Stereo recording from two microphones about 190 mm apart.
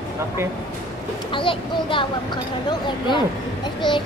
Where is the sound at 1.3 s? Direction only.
25° left (ahead or behind).